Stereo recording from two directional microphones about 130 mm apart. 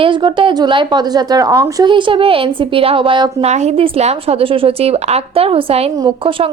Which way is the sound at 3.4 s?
60° right (ahead or behind).